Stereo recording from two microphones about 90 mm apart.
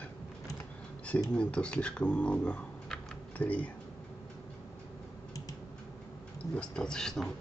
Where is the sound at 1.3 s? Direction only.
10° left (ahead or behind).